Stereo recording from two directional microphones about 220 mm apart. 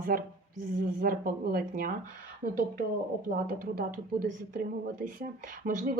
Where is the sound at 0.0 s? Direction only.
40° right (ahead or behind).